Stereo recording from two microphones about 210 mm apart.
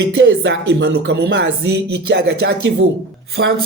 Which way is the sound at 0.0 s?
55° right (ahead or behind).